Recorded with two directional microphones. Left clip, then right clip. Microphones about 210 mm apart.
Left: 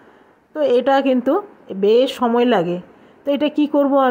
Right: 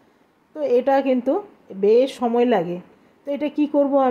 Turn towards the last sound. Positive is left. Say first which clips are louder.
# left 3 dB
turn(degrees=15)  # may be behind; listen again after turning